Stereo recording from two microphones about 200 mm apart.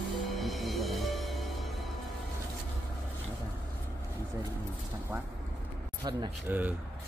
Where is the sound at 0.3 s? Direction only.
Centre (ahead or behind).